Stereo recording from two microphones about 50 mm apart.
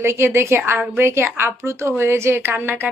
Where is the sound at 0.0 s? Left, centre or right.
Right.